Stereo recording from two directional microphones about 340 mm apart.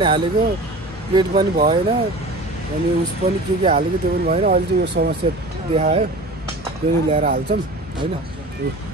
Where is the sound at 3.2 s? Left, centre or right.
Centre.